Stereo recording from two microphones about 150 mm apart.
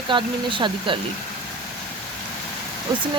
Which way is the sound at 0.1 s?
30° right (ahead or behind).